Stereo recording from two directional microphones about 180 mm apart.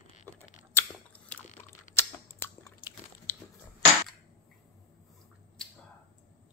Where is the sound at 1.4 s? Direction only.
40° left (ahead or behind).